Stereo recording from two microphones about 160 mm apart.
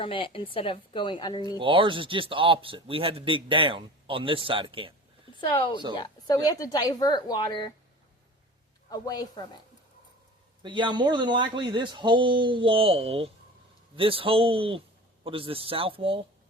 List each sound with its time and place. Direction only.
0.0 s a woman's voice: 35° left (ahead or behind)
1.5 s a man's voice: 35° right (ahead or behind)
5.4 s a woman's voice: 30° left (ahead or behind)
8.9 s a woman's voice: 25° left (ahead or behind)
10.6 s a man's voice: 30° right (ahead or behind)